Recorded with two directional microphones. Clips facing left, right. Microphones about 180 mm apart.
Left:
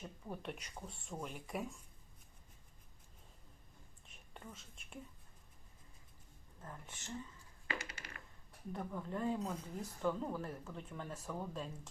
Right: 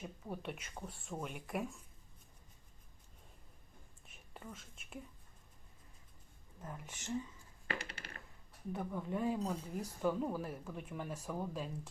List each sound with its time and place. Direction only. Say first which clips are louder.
0.0 s speech: right 2 dB; 5° right (ahead or behind)
4.0 s a sound: right 2 dB; 5° right (ahead or behind)
6.6 s speech: right 3 dB; 10° right (ahead or behind)
7.7 s coin: right 2 dB; 30° right (ahead or behind)
8.7 s speech: right 3 dB; 5° right (ahead or behind)